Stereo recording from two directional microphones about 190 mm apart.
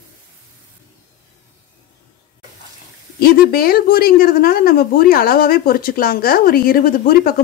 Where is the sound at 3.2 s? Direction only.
55° left (ahead or behind).